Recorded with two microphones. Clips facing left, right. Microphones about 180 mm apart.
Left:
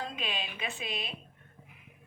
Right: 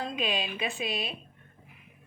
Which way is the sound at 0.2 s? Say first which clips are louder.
Right 7 dB; 15° right (ahead or behind).